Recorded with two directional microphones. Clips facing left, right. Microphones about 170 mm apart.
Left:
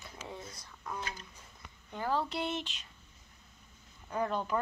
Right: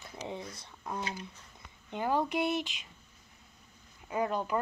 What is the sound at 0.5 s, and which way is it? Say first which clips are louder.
Speech: right 3 dB; 25° right (ahead or behind).